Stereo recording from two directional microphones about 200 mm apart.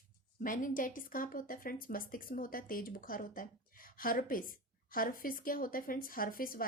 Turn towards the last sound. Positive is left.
turn(degrees=45)  # may be behind; listen again after turning